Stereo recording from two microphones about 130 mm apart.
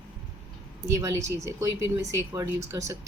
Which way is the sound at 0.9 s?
25° right (ahead or behind).